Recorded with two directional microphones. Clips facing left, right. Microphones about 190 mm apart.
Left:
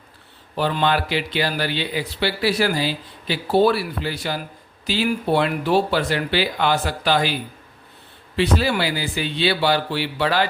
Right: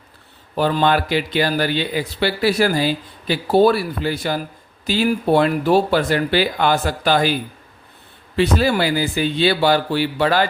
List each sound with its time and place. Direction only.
0.5 s speech: 45° right (ahead or behind)
8.4 s speech: 45° right (ahead or behind)